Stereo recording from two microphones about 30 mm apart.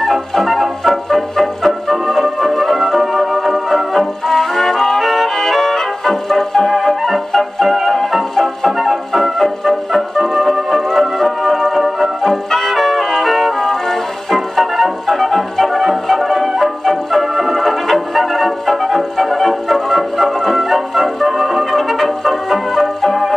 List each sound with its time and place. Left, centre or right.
0.0 s music: centre
21.9 s brass instrument: centre